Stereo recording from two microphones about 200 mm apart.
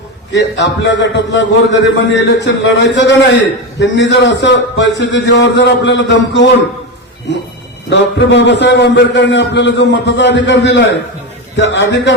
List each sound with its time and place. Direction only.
0.3 s a man's voice: 60° left (ahead or behind)
7.9 s a man's voice: 60° left (ahead or behind)